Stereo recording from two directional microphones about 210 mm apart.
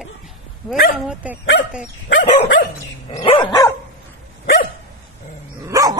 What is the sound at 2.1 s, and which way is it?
Dog, 50° left (ahead or behind).